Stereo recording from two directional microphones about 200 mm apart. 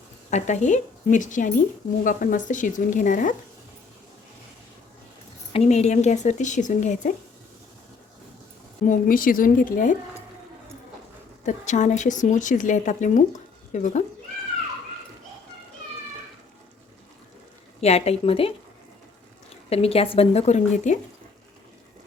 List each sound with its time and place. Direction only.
0.3 s speech: 35° left (ahead or behind)
5.5 s speech: 35° left (ahead or behind)
8.8 s a woman's voice: 40° left (ahead or behind)
11.4 s speech: 35° left (ahead or behind)
17.7 s speech: 30° left (ahead or behind)
19.7 s speech: 30° left (ahead or behind)